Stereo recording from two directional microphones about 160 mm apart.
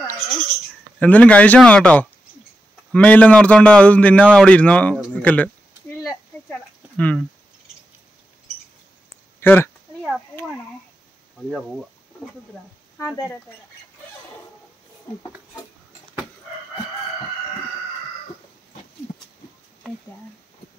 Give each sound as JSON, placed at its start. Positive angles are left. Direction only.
{"t": 0.9, "sound": "speech", "side_deg": 10}
{"t": 5.9, "sound": "a sound", "side_deg": 15}
{"t": 9.4, "sound": "speech", "side_deg": 15}
{"t": 13.0, "sound": "speech", "side_deg": 20}